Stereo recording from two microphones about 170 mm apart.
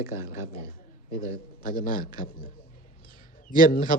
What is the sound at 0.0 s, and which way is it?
A man's voice, 60° left (ahead or behind).